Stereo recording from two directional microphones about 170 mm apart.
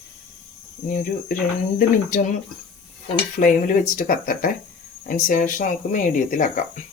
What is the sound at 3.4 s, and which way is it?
Speech, 55° left (ahead or behind).